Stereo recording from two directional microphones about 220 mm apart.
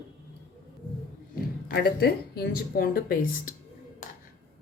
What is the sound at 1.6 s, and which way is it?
Speech, 45° left (ahead or behind).